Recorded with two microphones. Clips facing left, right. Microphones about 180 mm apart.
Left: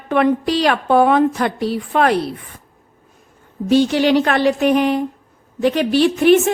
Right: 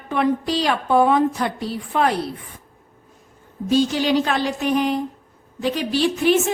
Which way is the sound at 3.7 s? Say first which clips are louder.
Left 4 dB; 65° left (ahead or behind).